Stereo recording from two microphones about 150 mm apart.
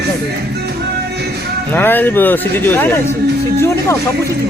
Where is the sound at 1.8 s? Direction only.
10° left (ahead or behind).